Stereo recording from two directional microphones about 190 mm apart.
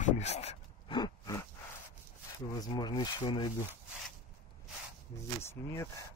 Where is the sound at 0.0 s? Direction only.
35° left (ahead or behind).